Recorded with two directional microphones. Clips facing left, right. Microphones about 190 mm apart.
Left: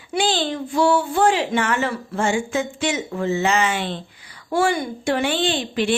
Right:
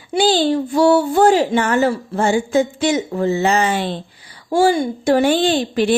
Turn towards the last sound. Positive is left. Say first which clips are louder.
# right 5 dB
turn(degrees=-40)  # may be behind; listen again after turning